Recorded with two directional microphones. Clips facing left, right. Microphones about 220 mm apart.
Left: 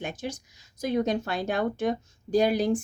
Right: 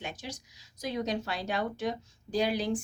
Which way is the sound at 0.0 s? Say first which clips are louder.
Left 7 dB; 50° left (ahead or behind).